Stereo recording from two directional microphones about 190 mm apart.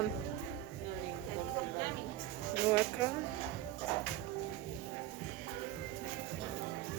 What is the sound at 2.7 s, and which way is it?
Speech, 10° right (ahead or behind).